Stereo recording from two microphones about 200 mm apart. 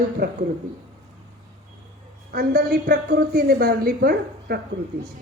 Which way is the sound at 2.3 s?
50° right (ahead or behind).